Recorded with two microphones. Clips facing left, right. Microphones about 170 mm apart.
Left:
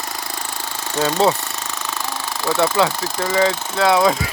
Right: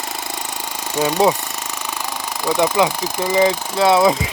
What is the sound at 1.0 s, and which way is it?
Speech, 15° right (ahead or behind).